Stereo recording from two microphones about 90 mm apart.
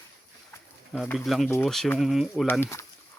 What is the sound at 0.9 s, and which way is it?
Speech, centre (ahead or behind).